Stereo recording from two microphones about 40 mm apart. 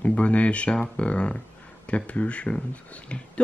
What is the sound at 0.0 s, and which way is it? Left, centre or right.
Speech, left.